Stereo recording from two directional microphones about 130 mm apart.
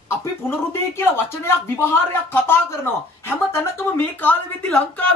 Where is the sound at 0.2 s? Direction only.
20° left (ahead or behind).